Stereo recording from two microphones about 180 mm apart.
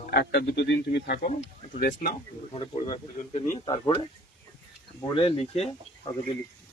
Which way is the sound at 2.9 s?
30° left (ahead or behind).